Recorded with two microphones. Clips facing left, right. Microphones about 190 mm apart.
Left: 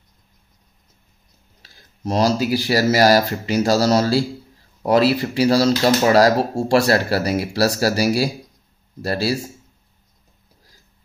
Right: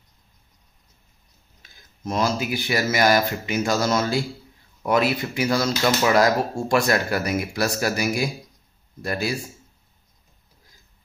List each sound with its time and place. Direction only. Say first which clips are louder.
1.6 s speech: left 5 dB; 35° left (ahead or behind)